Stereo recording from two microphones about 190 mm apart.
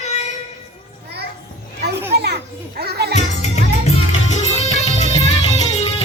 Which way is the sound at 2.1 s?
60° right (ahead or behind).